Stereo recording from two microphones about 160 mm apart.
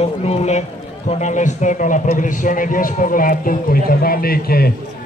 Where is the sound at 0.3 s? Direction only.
45° left (ahead or behind).